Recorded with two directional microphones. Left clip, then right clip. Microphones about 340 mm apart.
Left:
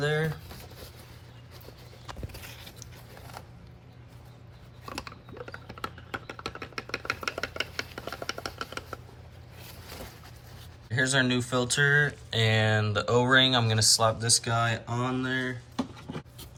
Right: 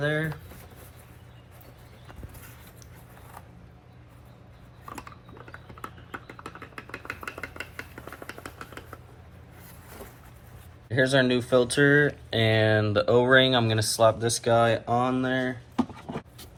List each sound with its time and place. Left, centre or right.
0.0 s speech: centre
5.5 s a sound: left
10.9 s speech: centre